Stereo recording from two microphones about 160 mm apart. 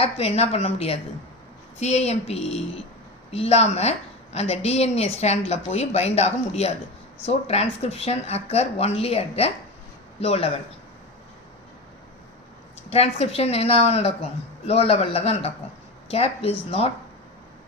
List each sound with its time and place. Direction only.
0.0 s a woman's voice: 40° left (ahead or behind)
12.9 s a woman's voice: 40° left (ahead or behind)